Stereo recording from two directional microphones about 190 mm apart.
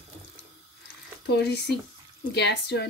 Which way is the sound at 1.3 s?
60° left (ahead or behind).